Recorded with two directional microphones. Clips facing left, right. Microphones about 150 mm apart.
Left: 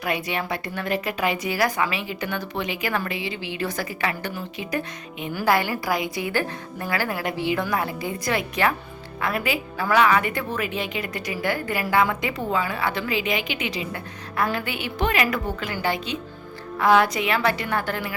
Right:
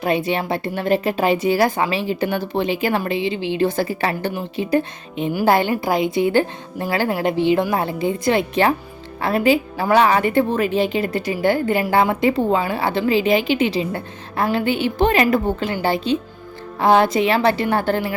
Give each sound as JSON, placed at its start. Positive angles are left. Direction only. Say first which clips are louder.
{"t": 0.0, "sound": "a woman's voice", "louder": "right 7 dB", "side_deg": -25}